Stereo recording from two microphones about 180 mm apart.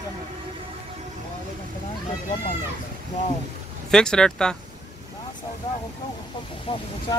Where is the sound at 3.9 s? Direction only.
5° left (ahead or behind).